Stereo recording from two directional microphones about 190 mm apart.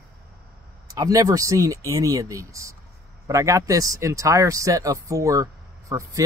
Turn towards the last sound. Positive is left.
turn(degrees=-15)  # may be behind; listen again after turning